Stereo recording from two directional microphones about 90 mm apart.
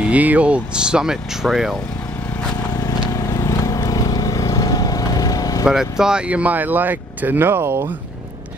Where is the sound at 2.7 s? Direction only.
45° left (ahead or behind).